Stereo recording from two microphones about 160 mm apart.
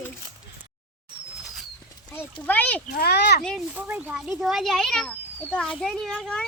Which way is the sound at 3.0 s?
90° left.